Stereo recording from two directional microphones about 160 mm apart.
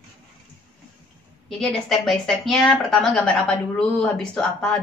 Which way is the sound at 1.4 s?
5° left (ahead or behind).